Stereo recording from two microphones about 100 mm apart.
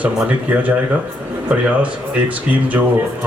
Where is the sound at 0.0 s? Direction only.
15° right (ahead or behind).